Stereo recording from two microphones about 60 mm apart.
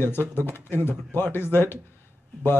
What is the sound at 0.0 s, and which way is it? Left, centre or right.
Speech, left.